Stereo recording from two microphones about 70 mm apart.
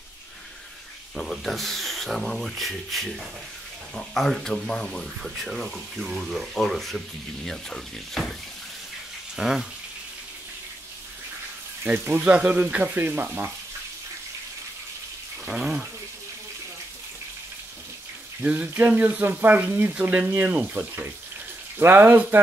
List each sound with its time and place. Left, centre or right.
1.1 s speech: centre
9.4 s speech: centre
12.2 s speech: centre
15.4 s speech: centre
18.4 s speech: right